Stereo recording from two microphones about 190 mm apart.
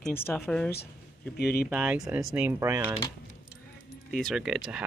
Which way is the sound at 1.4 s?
55° left (ahead or behind).